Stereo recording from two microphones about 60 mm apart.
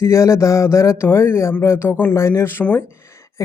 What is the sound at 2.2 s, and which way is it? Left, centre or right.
Speech, left.